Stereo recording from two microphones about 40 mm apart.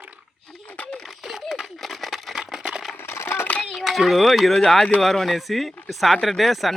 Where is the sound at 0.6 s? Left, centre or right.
Left.